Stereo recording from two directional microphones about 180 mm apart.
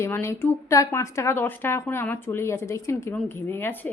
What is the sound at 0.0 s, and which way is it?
Speech, 15° left (ahead or behind).